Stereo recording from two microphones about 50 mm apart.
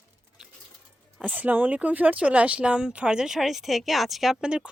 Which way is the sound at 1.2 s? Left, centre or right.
Right.